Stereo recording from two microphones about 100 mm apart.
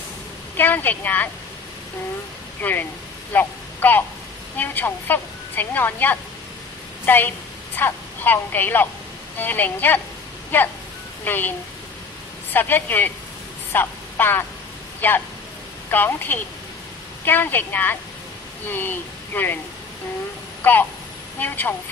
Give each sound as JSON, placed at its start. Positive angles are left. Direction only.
{"t": 0.6, "sound": "a woman's voice", "side_deg": 20}
{"t": 2.6, "sound": "a woman's voice", "side_deg": 20}
{"t": 12.5, "sound": "a woman's voice", "side_deg": 20}
{"t": 20.6, "sound": "a woman's voice", "side_deg": 20}